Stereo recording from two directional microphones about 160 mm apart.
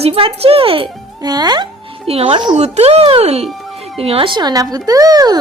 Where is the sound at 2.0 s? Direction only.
35° right (ahead or behind).